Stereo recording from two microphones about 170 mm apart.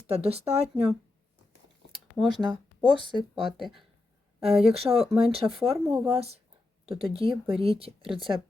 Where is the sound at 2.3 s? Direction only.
25° right (ahead or behind).